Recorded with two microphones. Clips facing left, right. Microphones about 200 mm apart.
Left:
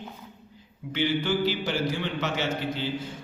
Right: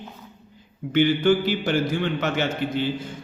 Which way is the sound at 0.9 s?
55° right (ahead or behind).